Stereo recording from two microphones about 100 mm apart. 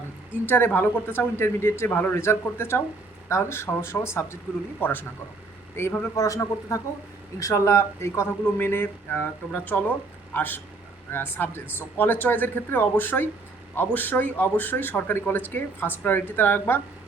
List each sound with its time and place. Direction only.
0.4 s a man's voice: 20° left (ahead or behind)